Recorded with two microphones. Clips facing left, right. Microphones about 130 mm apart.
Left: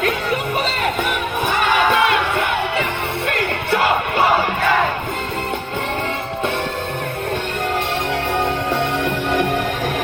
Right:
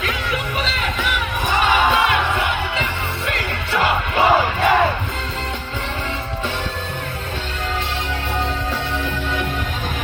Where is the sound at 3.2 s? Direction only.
50° left (ahead or behind).